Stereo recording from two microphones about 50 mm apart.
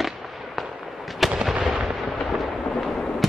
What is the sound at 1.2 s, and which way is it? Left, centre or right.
Artillery fire, centre.